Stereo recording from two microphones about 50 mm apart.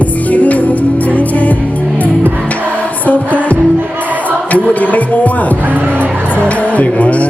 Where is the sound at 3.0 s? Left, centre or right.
Left.